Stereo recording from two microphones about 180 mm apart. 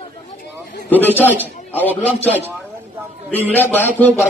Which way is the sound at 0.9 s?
10° left (ahead or behind).